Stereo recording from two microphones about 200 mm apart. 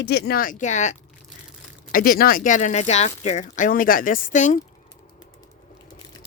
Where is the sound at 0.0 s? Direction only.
50° left (ahead or behind).